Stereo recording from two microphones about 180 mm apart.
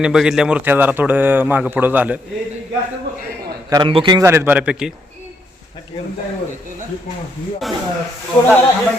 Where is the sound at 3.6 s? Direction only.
25° right (ahead or behind).